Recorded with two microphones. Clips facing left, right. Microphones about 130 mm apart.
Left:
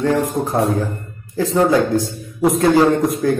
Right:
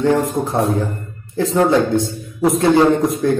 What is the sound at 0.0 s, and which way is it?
A man's voice, 25° right (ahead or behind).